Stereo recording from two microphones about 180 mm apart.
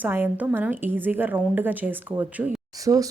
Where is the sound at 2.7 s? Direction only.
20° right (ahead or behind).